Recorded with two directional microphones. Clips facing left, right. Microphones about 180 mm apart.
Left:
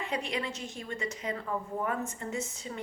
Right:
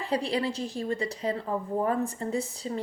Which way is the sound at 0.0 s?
35° right (ahead or behind).